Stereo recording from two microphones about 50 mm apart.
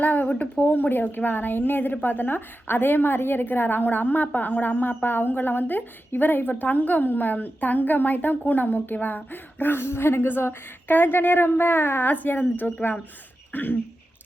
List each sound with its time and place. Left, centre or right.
0.0 s a woman's voice: left
13.5 s throat clearing: left